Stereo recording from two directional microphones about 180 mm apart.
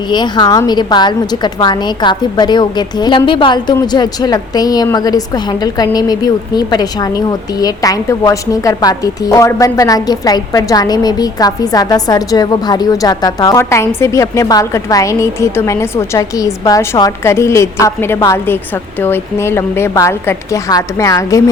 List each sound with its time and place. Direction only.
0.1 s a woman's voice: 25° left (ahead or behind)